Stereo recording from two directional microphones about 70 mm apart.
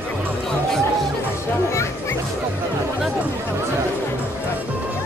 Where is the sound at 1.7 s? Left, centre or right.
Left.